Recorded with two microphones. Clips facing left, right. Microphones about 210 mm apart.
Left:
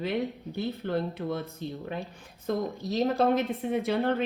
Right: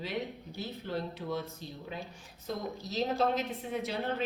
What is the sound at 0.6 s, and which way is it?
Speech, 55° left (ahead or behind).